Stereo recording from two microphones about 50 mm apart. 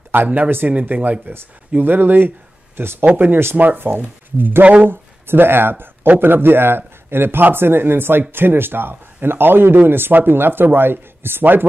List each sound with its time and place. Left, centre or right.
0.1 s speech: right
2.8 s speech: right
3.1 s speech: right